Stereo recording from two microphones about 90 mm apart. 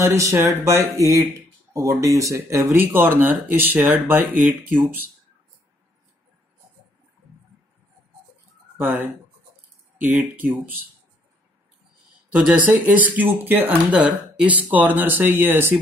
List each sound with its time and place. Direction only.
0.1 s speech: 35° right (ahead or behind)
2.7 s speech: 25° right (ahead or behind)
8.7 s speech: 25° right (ahead or behind)
12.3 s speech: 20° right (ahead or behind)